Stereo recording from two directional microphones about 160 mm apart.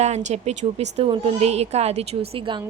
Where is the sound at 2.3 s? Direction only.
30° right (ahead or behind).